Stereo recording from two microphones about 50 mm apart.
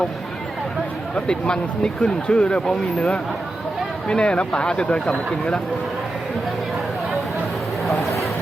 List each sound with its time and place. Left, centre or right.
1.1 s speech: centre